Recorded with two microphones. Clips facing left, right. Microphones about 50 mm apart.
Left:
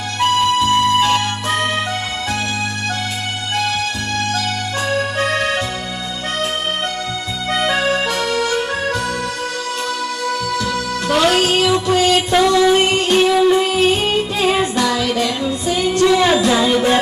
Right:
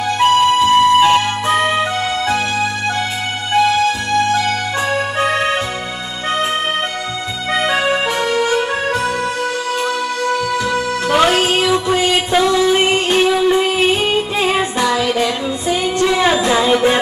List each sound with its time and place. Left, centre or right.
0.2 s music: centre
3.5 s music: centre
7.5 s accordion: centre
10.2 s music: centre
13.2 s music: centre